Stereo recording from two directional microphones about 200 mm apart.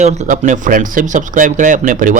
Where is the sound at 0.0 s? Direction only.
35° right (ahead or behind).